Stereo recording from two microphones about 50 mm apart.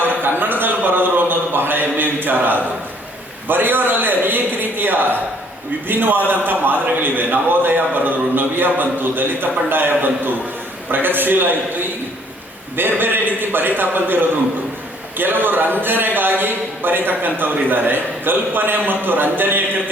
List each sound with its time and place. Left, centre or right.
0.2 s a man's voice: right
0.7 s a sound: right
3.5 s a man's voice: right
15.2 s a man's voice: right